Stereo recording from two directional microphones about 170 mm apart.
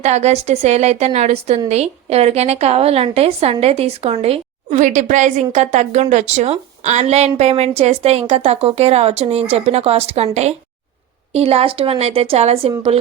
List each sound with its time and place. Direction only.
0.0 s a woman's voice: 40° right (ahead or behind)